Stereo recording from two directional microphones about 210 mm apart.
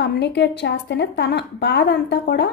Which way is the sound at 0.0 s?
55° left (ahead or behind).